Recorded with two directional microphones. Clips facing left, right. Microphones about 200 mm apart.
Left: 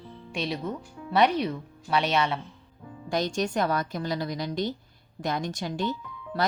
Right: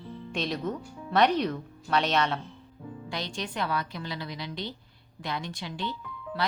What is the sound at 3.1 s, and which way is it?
Speech, 45° left (ahead or behind).